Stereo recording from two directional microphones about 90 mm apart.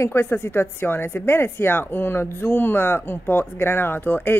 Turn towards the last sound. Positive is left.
turn(degrees=20)  # may be behind; listen again after turning